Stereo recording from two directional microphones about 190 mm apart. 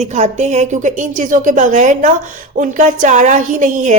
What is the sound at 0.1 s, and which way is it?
A woman's voice, 35° right (ahead or behind).